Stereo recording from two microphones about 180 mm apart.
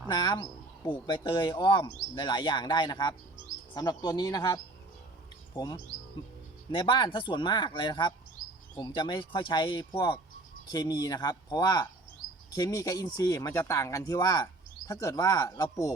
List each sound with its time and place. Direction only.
0.1 s speech: 25° left (ahead or behind)